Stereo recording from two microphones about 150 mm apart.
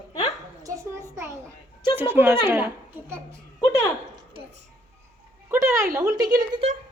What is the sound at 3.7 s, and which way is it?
Speech, 20° left (ahead or behind).